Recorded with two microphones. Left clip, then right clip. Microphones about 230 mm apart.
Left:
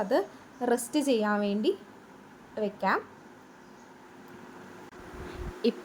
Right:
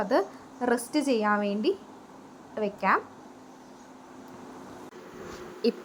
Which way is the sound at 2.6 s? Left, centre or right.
Centre.